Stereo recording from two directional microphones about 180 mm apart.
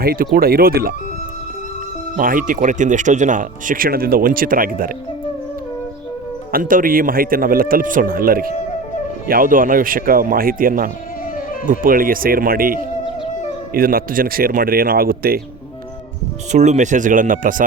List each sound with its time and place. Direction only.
0.0 s speech: 55° right (ahead or behind)
2.1 s speech: 50° right (ahead or behind)
6.5 s speech: 50° right (ahead or behind)
16.5 s speech: 40° right (ahead or behind)